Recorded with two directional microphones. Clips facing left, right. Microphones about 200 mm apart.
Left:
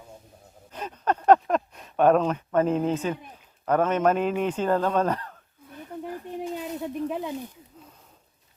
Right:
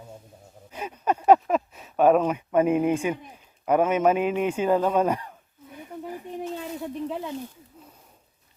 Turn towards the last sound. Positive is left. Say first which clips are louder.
# left 1 dB
turn(degrees=15)  # may be behind; listen again after turning